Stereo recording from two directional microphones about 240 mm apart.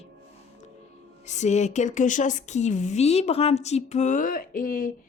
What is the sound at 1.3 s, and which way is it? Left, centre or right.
A woman's voice, left.